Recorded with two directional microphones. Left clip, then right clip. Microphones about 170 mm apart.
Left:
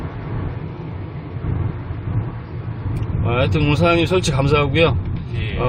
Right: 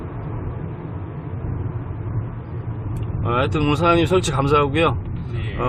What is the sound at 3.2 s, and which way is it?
Speech, 10° right (ahead or behind).